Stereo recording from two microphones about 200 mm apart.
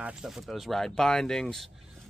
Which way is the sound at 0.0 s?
5° right (ahead or behind).